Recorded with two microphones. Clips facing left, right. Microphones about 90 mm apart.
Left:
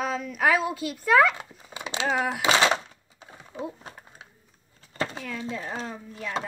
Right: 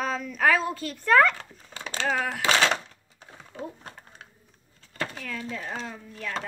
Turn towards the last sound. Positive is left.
turn(degrees=15)  # may be behind; listen again after turning